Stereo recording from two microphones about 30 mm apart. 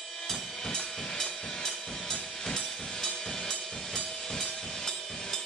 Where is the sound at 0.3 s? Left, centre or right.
Centre.